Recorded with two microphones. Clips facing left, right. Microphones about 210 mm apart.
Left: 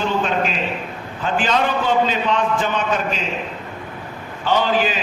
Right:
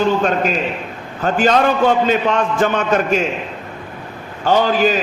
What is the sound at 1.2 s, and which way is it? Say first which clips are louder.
A man's voice: right 5 dB; 45° right (ahead or behind).